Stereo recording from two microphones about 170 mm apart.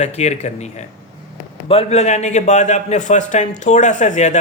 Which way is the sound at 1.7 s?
35° left (ahead or behind).